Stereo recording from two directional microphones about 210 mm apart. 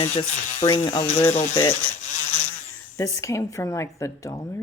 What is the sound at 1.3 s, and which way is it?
Speech, 35° left (ahead or behind).